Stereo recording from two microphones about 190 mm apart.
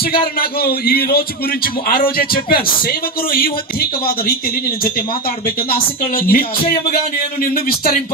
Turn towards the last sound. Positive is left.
turn(degrees=50)  # may be behind; listen again after turning